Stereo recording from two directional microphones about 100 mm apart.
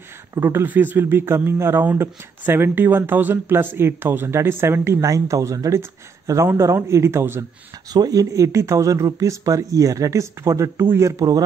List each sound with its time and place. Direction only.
0.3 s speech: 25° right (ahead or behind)
5.0 s speech: 35° right (ahead or behind)
7.9 s speech: 40° right (ahead or behind)